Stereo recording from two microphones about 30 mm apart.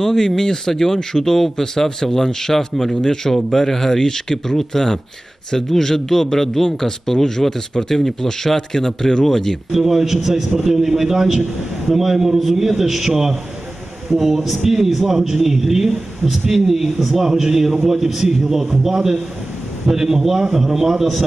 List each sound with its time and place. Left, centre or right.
0.0 s speech: centre
9.7 s a man's voice: centre